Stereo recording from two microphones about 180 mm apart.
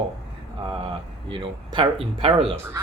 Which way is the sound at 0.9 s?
30° right (ahead or behind).